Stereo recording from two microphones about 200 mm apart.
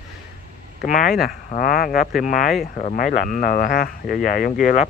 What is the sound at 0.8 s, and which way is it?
Speech, 45° left (ahead or behind).